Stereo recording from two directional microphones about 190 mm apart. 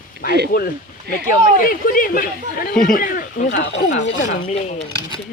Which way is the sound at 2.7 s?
5° left (ahead or behind).